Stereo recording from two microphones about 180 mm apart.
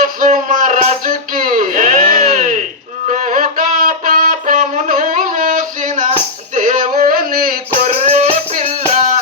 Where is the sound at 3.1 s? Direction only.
45° right (ahead or behind).